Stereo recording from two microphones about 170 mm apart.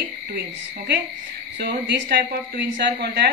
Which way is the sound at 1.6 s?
65° right (ahead or behind).